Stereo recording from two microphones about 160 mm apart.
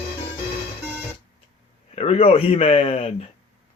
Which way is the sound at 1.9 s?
40° left (ahead or behind).